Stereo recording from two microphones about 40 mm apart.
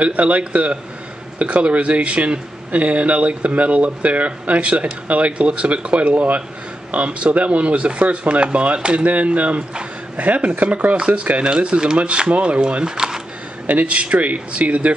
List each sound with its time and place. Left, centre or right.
0.0 s speech: right
11.0 s speech: right
12.8 s speech: centre
13.7 s speech: right